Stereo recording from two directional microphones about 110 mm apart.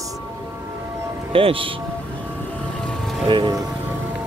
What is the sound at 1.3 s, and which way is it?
Speech, 55° right (ahead or behind).